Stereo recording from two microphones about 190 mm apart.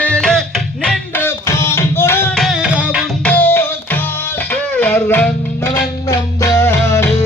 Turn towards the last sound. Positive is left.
turn(degrees=15)  # may be behind; listen again after turning